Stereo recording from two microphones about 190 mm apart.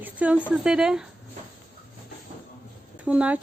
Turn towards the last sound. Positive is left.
turn(degrees=-5)  # may be behind; listen again after turning